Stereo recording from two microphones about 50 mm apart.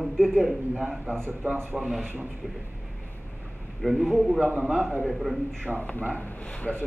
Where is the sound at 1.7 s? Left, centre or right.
Centre.